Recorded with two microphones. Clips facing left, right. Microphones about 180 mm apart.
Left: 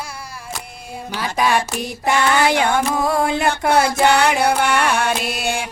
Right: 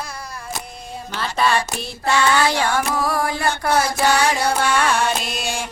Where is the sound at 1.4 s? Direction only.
15° left (ahead or behind).